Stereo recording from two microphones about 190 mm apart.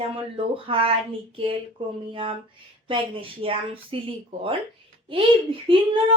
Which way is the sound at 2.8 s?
25° right (ahead or behind).